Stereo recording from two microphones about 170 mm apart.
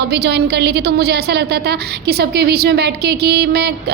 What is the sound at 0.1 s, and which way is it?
A woman's voice, 75° right (ahead or behind).